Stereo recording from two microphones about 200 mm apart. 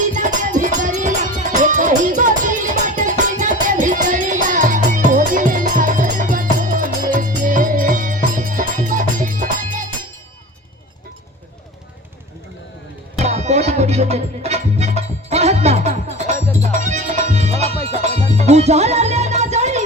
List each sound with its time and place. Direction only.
0.0 s music: 40° right (ahead or behind)
13.1 s music: 35° right (ahead or behind)